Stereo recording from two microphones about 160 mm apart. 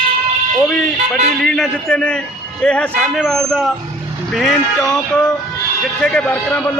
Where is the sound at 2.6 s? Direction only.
5° left (ahead or behind).